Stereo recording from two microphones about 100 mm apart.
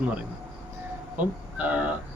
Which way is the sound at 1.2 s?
15° right (ahead or behind).